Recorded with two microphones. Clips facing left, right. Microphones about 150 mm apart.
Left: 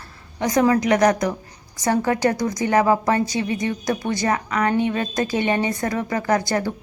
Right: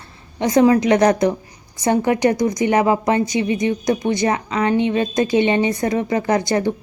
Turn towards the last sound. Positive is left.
turn(degrees=-20)  # may be behind; listen again after turning